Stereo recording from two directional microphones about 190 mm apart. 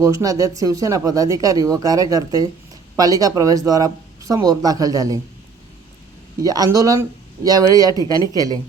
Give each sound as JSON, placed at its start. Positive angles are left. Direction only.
{"t": 0.0, "sound": "speech", "side_deg": -15}
{"t": 6.4, "sound": "speech", "side_deg": -20}